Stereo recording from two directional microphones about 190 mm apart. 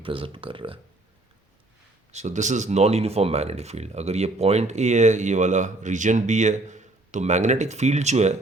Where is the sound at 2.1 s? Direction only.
40° right (ahead or behind).